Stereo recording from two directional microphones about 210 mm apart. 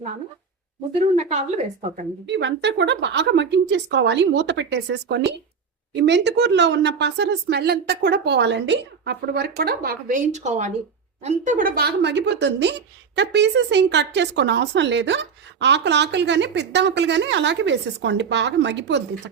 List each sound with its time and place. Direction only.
1.1 s a woman's voice: 30° right (ahead or behind)
2.2 s a woman's voice: 55° right (ahead or behind)